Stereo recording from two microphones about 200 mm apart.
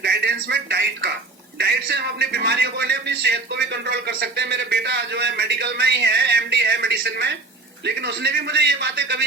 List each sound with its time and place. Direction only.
0.0 s a man's voice: 55° right (ahead or behind)